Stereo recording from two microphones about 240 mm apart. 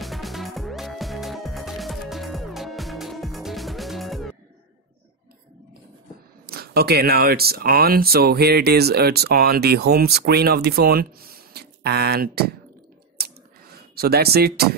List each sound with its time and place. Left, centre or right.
0.0 s music: centre
6.4 s speech: right
13.9 s speech: right